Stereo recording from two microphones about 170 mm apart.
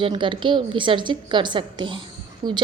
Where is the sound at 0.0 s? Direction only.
30° right (ahead or behind).